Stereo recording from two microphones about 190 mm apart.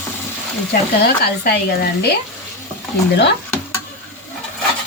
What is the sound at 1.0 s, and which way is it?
Speech, 55° left (ahead or behind).